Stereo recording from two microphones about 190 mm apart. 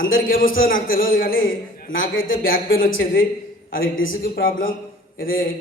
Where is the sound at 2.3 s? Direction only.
50° left (ahead or behind).